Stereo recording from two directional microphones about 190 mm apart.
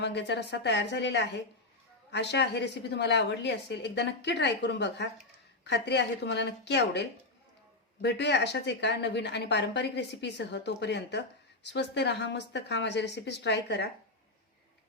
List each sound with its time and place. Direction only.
0.0 s a woman's voice: 65° left (ahead or behind)